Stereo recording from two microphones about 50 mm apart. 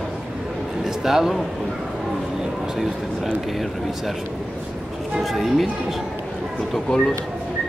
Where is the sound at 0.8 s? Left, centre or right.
Centre.